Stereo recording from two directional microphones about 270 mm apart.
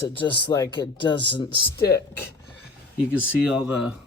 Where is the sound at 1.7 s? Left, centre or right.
Left.